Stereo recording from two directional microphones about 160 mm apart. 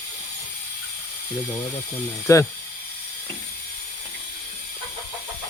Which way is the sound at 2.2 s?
15° left (ahead or behind).